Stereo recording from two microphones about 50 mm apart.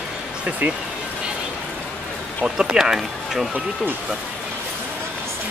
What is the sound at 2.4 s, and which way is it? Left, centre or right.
Speech, centre.